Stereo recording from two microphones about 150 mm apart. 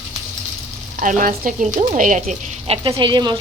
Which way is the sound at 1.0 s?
65° right (ahead or behind).